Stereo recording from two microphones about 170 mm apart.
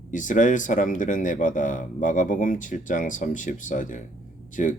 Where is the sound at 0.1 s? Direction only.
50° left (ahead or behind).